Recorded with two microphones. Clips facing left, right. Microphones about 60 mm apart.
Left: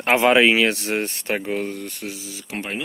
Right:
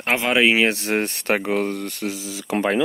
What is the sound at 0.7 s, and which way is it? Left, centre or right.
Speech, right.